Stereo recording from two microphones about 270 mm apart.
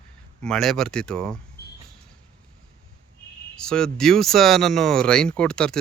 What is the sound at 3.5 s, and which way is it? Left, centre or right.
Speech, centre.